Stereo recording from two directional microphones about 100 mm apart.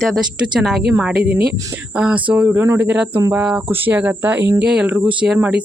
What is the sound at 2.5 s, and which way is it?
Speech, 25° right (ahead or behind).